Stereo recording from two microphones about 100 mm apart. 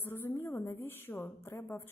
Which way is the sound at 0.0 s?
20° left (ahead or behind).